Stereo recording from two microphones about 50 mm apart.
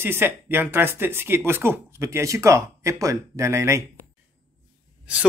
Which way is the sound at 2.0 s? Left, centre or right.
Right.